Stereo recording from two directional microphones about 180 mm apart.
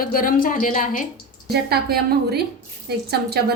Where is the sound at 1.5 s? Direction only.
60° right (ahead or behind).